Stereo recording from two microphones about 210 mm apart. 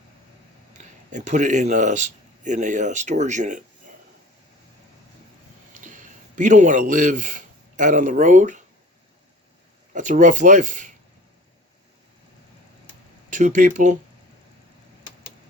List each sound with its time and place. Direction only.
0.7 s speech: 35° right (ahead or behind)
5.8 s a man's voice: 40° right (ahead or behind)
9.9 s speech: 35° right (ahead or behind)
13.3 s speech: 35° right (ahead or behind)